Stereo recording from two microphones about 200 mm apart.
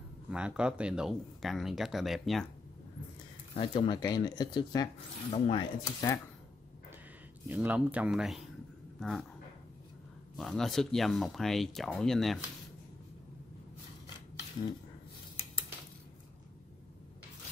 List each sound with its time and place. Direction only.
0.3 s speech: 5° right (ahead or behind)
3.5 s speech: 25° left (ahead or behind)
7.4 s speech: 10° right (ahead or behind)
10.3 s speech: centre (ahead or behind)